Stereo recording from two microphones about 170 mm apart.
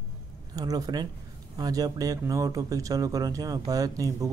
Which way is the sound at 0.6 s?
20° right (ahead or behind).